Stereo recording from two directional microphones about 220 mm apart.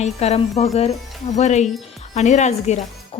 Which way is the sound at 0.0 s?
30° left (ahead or behind).